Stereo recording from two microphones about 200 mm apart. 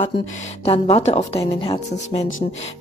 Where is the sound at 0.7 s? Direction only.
30° left (ahead or behind).